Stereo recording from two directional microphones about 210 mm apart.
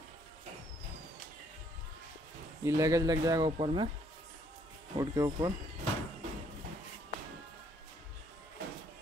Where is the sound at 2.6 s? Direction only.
15° right (ahead or behind).